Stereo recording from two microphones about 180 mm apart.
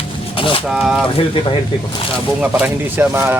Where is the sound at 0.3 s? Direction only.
30° left (ahead or behind).